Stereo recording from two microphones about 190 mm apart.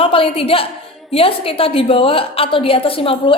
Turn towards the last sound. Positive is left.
turn(degrees=30)  # may be behind; listen again after turning